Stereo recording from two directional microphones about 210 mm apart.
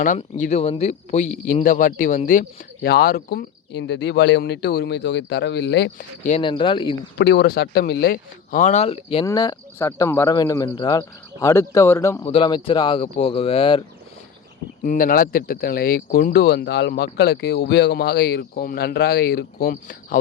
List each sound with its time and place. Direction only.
0.2 s speech: 35° left (ahead or behind); by 5.9 s 55° left (ahead or behind)
6.2 s speech: 25° left (ahead or behind)
7.2 s speech: 50° left (ahead or behind); by 12.2 s 15° left (ahead or behind)
12.2 s speech: 25° left (ahead or behind)
14.8 s speech: 40° left (ahead or behind)